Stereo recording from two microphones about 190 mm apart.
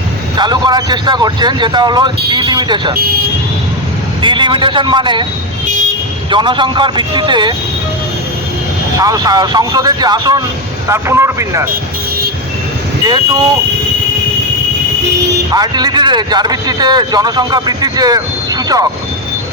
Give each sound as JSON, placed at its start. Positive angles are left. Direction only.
{"t": 0.3, "sound": "speech", "side_deg": -25}
{"t": 4.2, "sound": "speech", "side_deg": -25}
{"t": 5.6, "sound": "vehicle", "side_deg": -40}
{"t": 6.3, "sound": "speech", "side_deg": -25}
{"t": 9.0, "sound": "speech", "side_deg": -20}
{"t": 13.1, "sound": "speech", "side_deg": -20}
{"t": 15.5, "sound": "speech", "side_deg": -20}